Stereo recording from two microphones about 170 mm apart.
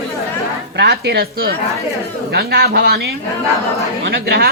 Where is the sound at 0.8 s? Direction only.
70° right (ahead or behind).